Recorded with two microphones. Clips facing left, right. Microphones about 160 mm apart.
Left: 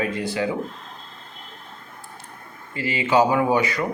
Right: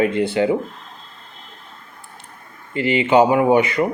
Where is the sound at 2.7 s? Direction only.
25° right (ahead or behind).